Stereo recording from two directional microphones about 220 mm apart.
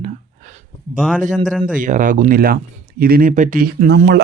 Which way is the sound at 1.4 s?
Centre (ahead or behind).